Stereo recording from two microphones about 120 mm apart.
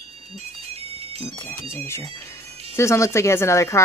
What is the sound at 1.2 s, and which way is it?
Speech, 55° left (ahead or behind).